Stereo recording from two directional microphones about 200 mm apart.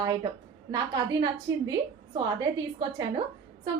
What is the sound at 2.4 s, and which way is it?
Speech, 20° right (ahead or behind).